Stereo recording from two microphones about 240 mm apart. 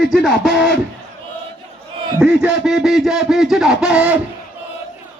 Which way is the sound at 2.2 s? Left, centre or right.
Centre.